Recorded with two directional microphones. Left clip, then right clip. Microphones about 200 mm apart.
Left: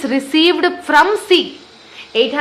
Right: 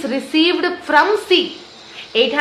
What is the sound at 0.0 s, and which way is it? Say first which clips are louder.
A woman's voice: left 3 dB; 35° left (ahead or behind).